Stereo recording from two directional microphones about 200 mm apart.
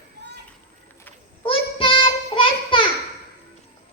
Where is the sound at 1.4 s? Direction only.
25° left (ahead or behind).